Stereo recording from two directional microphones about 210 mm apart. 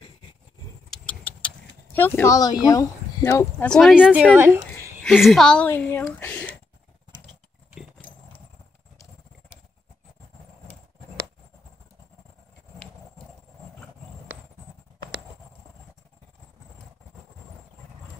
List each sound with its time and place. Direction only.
0.8 s vehicle: 5° left (ahead or behind)
2.0 s speech: 10° left (ahead or behind)
3.6 s speech: centre (ahead or behind)
5.0 s a woman's voice: centre (ahead or behind)